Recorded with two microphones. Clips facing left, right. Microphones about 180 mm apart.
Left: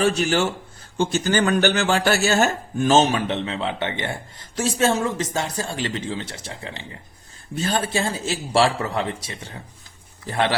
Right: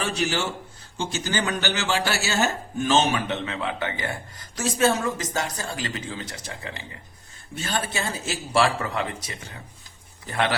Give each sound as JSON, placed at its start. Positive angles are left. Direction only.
{"t": 0.0, "sound": "a man's voice", "side_deg": 50}